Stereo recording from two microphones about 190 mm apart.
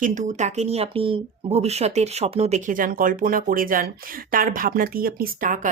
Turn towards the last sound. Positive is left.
turn(degrees=-45)  # may be behind; listen again after turning